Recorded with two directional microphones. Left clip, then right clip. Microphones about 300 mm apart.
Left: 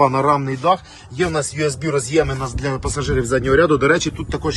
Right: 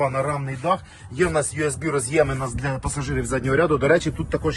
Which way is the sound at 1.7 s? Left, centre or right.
Centre.